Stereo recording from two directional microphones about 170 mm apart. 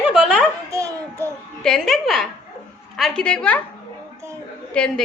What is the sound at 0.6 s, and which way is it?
Speech, 20° right (ahead or behind).